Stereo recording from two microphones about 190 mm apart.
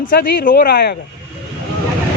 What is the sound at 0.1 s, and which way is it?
Speech, 50° left (ahead or behind).